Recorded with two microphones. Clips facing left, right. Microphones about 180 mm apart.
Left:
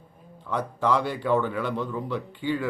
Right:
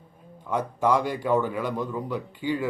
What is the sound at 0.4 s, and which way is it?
A man's voice, 15° right (ahead or behind).